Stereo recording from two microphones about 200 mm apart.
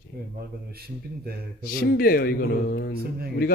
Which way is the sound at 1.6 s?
45° left (ahead or behind).